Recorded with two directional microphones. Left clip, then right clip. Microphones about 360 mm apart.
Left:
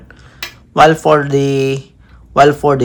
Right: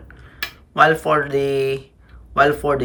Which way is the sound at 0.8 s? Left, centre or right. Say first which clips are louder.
Left 6 dB; centre.